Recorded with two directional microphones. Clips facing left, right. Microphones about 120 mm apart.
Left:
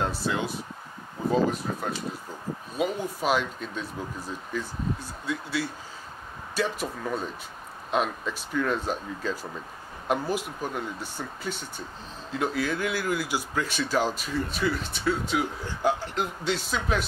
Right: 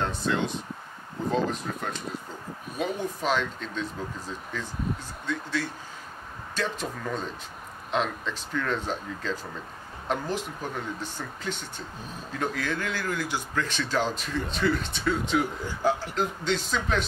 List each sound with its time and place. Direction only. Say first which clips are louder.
0.0 s speech: right 1 dB; 5° left (ahead or behind)